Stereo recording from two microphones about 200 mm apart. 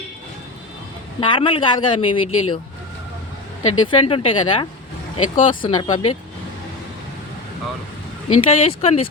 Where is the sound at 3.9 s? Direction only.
25° left (ahead or behind).